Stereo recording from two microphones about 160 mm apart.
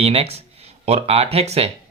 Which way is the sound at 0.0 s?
40° right (ahead or behind).